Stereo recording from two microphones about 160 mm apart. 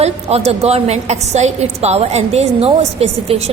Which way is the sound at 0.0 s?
40° right (ahead or behind).